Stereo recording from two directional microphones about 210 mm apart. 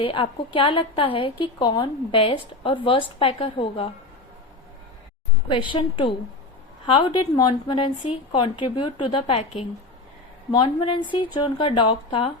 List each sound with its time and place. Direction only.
0.0 s a woman's voice: 25° left (ahead or behind)
5.5 s a woman's voice: 25° left (ahead or behind)